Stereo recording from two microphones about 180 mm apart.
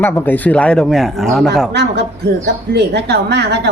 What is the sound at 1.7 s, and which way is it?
A woman's voice, 70° right (ahead or behind).